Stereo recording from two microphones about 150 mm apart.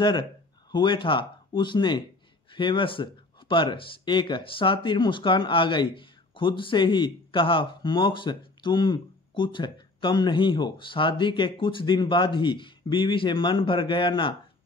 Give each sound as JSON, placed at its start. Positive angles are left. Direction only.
{"t": 0.7, "sound": "speech", "side_deg": 30}